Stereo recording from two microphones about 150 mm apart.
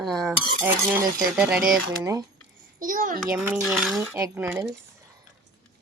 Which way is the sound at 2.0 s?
20° right (ahead or behind).